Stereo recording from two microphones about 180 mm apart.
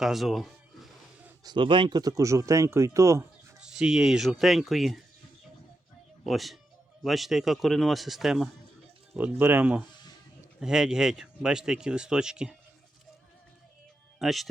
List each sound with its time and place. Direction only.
0.0 s a sound: centre (ahead or behind)
1.5 s speech: 25° right (ahead or behind)
3.6 s speech: 5° right (ahead or behind)
6.2 s speech: centre (ahead or behind)
14.2 s speech: centre (ahead or behind)